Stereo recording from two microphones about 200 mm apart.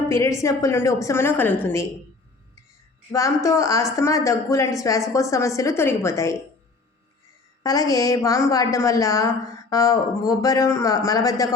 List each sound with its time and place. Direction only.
0.1 s a woman's voice: 15° left (ahead or behind)
3.1 s a woman's voice: 15° left (ahead or behind)
7.6 s a woman's voice: 20° left (ahead or behind)